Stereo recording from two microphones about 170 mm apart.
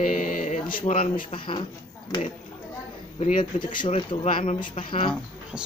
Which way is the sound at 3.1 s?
45° left (ahead or behind).